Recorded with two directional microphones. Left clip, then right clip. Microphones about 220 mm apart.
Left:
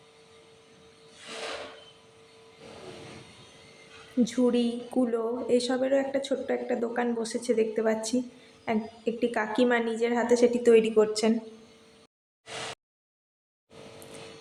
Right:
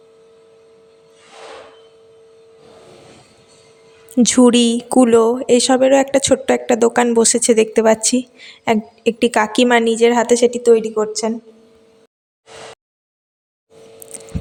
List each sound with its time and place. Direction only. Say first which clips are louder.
4.2 s speech: right 14 dB; 45° right (ahead or behind)
10.6 s a woman's voice: right 7 dB; 25° right (ahead or behind)